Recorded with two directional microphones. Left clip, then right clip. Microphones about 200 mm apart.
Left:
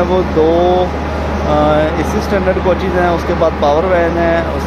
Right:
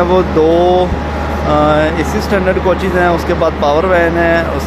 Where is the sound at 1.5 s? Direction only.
10° right (ahead or behind).